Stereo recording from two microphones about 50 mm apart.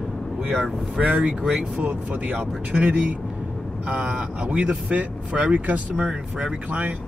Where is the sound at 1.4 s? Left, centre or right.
Centre.